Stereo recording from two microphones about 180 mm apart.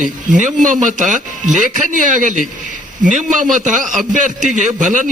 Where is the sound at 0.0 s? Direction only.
45° right (ahead or behind).